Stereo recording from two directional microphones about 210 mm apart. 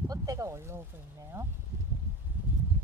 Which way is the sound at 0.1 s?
15° right (ahead or behind).